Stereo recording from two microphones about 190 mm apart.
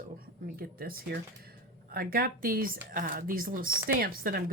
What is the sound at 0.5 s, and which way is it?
Speech, 50° right (ahead or behind).